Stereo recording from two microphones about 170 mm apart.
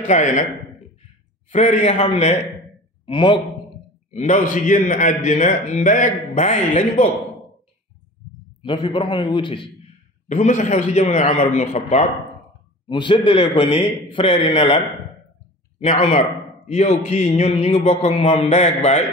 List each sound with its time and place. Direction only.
0.0 s a man's voice: 45° left (ahead or behind)
1.5 s a man's voice: 45° left (ahead or behind)
3.1 s a man's voice: 30° left (ahead or behind)
4.1 s a man's voice: 45° left (ahead or behind)
8.6 s a man's voice: 30° left (ahead or behind)
10.2 s a man's voice: 45° left (ahead or behind)
12.8 s a man's voice: 30° left (ahead or behind)
15.8 s a man's voice: 45° left (ahead or behind)